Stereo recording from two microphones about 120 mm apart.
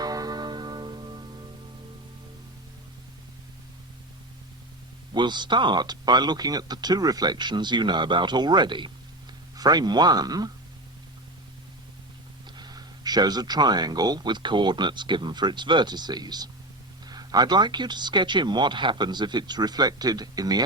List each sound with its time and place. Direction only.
0.0 s music: 30° right (ahead or behind)
5.1 s speech: 40° right (ahead or behind)
12.5 s speech: 35° right (ahead or behind)